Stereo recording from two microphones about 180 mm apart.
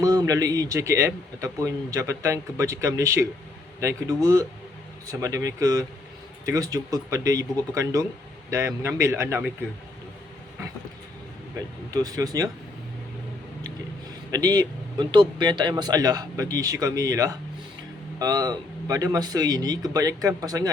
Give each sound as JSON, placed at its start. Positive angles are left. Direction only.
{"t": 0.0, "sound": "a man's voice", "side_deg": -20}
{"t": 11.9, "sound": "a man's voice", "side_deg": -20}
{"t": 14.3, "sound": "a man's voice", "side_deg": -20}